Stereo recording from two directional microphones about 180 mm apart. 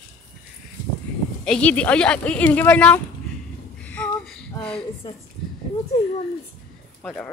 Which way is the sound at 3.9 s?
10° left (ahead or behind).